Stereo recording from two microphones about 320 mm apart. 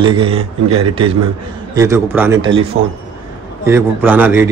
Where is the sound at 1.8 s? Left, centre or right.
Centre.